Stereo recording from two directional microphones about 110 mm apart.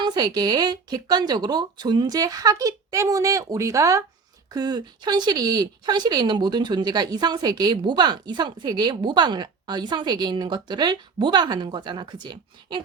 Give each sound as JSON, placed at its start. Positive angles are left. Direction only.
{"t": 0.0, "sound": "speech", "side_deg": -40}